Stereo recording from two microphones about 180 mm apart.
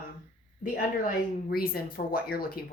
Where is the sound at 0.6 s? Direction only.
50° left (ahead or behind).